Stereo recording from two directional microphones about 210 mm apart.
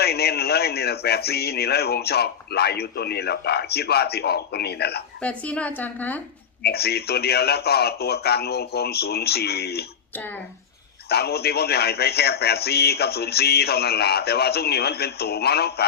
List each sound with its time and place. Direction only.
0.0 s speech: 50° left (ahead or behind)
5.2 s a woman's voice: 5° left (ahead or behind)
6.6 s speech: 50° left (ahead or behind)
10.2 s a woman's voice: 10° left (ahead or behind)
11.1 s speech: 50° left (ahead or behind)